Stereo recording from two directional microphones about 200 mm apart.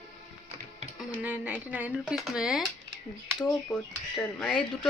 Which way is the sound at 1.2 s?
5° right (ahead or behind).